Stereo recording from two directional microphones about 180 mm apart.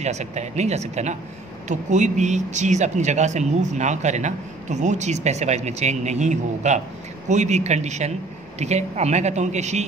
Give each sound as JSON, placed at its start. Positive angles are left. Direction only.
{"t": 0.0, "sound": "speech", "side_deg": -40}